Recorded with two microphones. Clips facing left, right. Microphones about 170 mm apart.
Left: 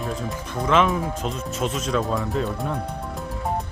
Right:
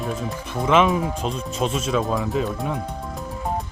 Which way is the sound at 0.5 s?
10° right (ahead or behind).